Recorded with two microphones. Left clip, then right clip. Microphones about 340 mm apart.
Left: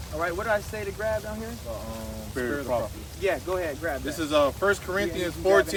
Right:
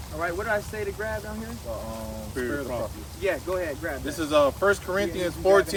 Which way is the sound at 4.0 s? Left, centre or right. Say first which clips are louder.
Right 2 dB; centre.